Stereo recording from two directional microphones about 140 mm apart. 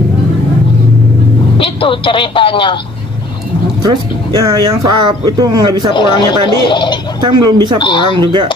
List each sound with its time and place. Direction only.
1.6 s speech: 40° left (ahead or behind)
3.8 s speech: 30° right (ahead or behind)
5.9 s speech: 35° left (ahead or behind)
7.2 s speech: 30° right (ahead or behind)
7.8 s speech: 35° left (ahead or behind)